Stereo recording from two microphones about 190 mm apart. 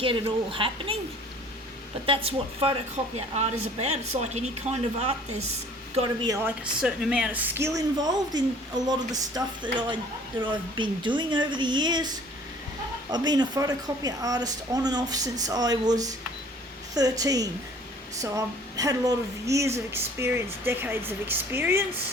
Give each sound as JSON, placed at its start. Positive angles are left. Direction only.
{"t": 0.0, "sound": "a woman's voice", "side_deg": -30}
{"t": 2.0, "sound": "a woman's voice", "side_deg": -30}
{"t": 6.2, "sound": "speech", "side_deg": -15}
{"t": 6.8, "sound": "a woman's voice", "side_deg": -5}